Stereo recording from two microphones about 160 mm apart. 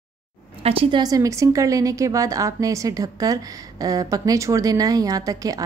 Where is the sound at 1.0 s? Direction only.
20° right (ahead or behind).